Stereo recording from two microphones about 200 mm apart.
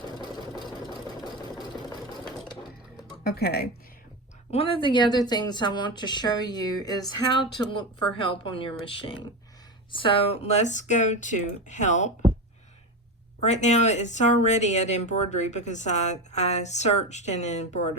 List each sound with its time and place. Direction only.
1.2 s engine: 20° left (ahead or behind)
2.2 s sewing machine: 5° left (ahead or behind)
3.2 s speech: 50° left (ahead or behind)
4.5 s a woman's voice: 30° left (ahead or behind)
13.4 s speech: 35° left (ahead or behind)